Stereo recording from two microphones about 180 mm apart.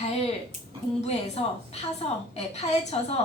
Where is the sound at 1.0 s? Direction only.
35° left (ahead or behind).